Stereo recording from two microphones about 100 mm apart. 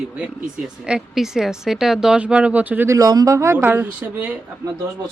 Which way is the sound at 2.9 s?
35° right (ahead or behind).